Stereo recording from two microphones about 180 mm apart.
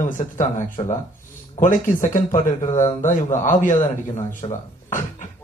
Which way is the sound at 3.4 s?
45° left (ahead or behind).